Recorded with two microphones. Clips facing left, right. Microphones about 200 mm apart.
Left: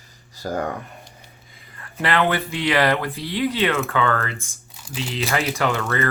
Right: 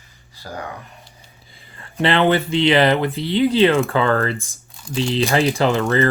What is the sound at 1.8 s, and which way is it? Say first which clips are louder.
Speech: right 4 dB; 25° right (ahead or behind).